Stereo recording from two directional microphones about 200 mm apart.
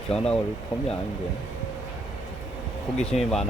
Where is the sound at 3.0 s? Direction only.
5° left (ahead or behind).